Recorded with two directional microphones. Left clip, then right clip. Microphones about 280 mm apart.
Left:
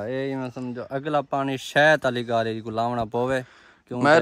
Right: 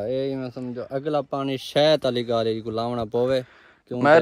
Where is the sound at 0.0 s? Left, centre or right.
Left.